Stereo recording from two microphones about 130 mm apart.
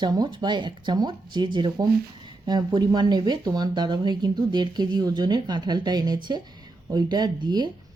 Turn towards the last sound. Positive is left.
turn(degrees=-35)  # may be behind; listen again after turning